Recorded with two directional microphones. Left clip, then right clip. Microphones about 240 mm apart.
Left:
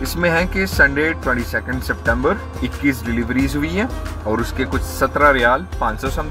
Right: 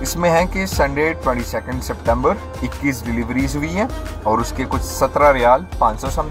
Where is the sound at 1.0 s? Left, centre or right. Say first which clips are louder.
Even; centre.